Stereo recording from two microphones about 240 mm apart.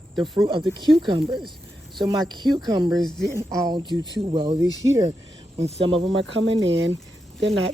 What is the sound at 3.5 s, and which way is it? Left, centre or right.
Speech, centre.